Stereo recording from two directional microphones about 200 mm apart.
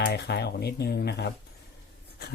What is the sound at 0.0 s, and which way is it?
Speech, 55° left (ahead or behind).